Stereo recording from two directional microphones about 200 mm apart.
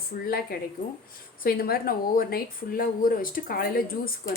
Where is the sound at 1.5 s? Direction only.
50° left (ahead or behind).